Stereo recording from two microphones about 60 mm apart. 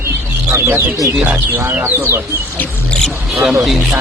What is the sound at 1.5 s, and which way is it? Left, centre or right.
Speech, right.